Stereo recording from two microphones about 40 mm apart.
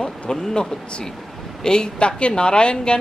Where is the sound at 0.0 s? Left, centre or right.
Centre.